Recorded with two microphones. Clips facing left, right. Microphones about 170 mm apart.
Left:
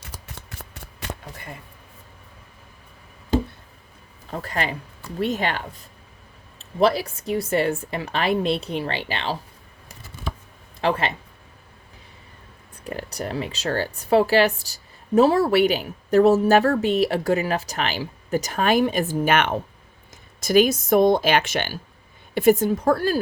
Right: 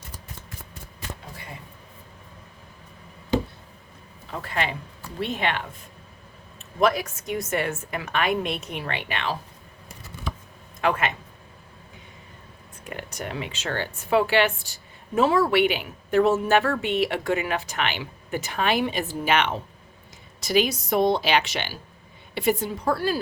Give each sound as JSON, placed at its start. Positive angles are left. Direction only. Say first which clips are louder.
{"t": 0.0, "sound": "shuffling cards", "louder": "left 1 dB", "side_deg": 80}
{"t": 4.3, "sound": "speech", "louder": "left 1 dB", "side_deg": 40}
{"t": 10.8, "sound": "speech", "louder": "left 1 dB", "side_deg": 30}
{"t": 12.8, "sound": "speech", "louder": "left 4 dB", "side_deg": 35}